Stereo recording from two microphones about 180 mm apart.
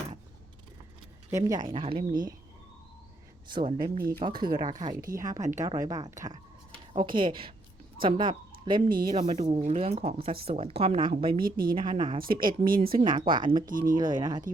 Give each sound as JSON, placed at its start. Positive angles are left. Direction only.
{"t": 1.3, "sound": "a woman's voice", "side_deg": -20}
{"t": 3.5, "sound": "a woman's voice", "side_deg": -25}
{"t": 5.4, "sound": "a woman's voice", "side_deg": -40}
{"t": 5.6, "sound": "a woman's voice", "side_deg": -20}
{"t": 9.1, "sound": "a woman's voice", "side_deg": -40}
{"t": 11.3, "sound": "speech", "side_deg": -55}
{"t": 11.8, "sound": "a woman's voice", "side_deg": -30}
{"t": 12.2, "sound": "speech", "side_deg": -50}
{"t": 13.1, "sound": "a woman's voice", "side_deg": -25}
{"t": 13.7, "sound": "speech", "side_deg": -50}
{"t": 13.9, "sound": "a woman's voice", "side_deg": -25}